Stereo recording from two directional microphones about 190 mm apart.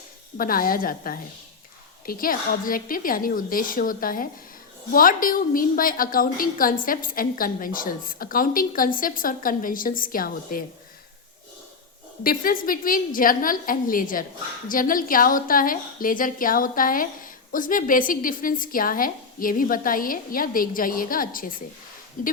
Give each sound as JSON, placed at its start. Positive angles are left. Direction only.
{"t": 0.3, "sound": "a woman's voice", "side_deg": 50}
{"t": 12.2, "sound": "a woman's voice", "side_deg": 50}